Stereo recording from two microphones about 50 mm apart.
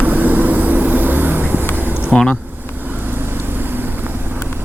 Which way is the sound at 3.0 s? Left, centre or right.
Right.